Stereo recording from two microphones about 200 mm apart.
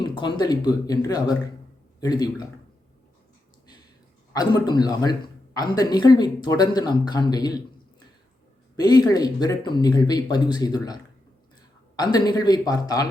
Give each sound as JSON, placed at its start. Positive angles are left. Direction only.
{"t": 0.0, "sound": "speech", "side_deg": 25}
{"t": 4.4, "sound": "speech", "side_deg": 20}
{"t": 8.7, "sound": "speech", "side_deg": 20}